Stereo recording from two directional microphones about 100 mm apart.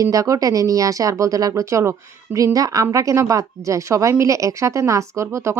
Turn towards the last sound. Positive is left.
turn(degrees=-30)  # may be behind; listen again after turning